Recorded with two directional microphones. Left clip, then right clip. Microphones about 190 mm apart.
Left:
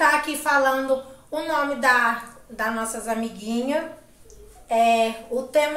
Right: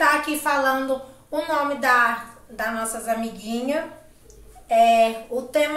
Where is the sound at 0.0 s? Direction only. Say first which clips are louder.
Even; centre (ahead or behind).